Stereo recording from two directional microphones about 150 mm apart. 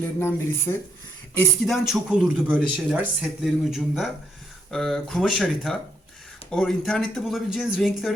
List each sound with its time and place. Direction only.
0.2 s speech: 15° left (ahead or behind)
1.6 s a man's voice: centre (ahead or behind)